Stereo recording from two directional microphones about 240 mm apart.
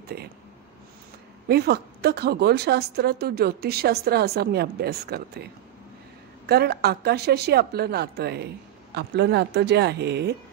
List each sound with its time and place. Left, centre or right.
1.5 s a woman's voice: right